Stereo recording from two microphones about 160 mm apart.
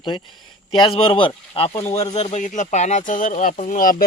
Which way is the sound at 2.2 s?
45° left (ahead or behind).